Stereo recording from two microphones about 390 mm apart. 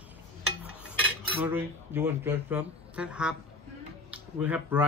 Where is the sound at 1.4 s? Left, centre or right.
Centre.